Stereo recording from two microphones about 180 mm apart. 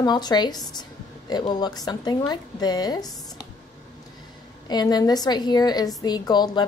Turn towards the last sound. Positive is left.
turn(degrees=25)  # may be behind; listen again after turning